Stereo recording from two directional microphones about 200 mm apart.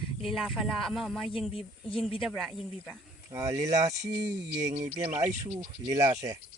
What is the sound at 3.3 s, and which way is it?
Speech, 15° right (ahead or behind).